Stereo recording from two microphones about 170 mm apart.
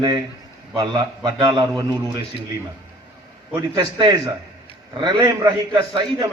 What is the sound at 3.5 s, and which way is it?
A man's voice, 25° right (ahead or behind).